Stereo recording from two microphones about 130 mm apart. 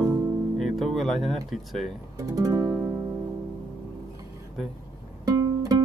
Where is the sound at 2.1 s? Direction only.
25° right (ahead or behind).